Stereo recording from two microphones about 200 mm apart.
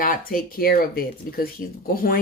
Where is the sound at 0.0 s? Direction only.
45° left (ahead or behind).